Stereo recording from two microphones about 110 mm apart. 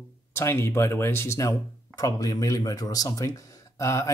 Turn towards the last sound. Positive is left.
turn(degrees=30)  # may be behind; listen again after turning